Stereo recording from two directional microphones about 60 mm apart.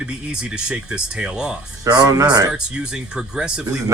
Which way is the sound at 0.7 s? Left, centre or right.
Centre.